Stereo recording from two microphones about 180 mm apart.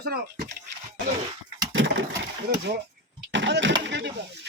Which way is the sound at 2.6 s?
75° right (ahead or behind).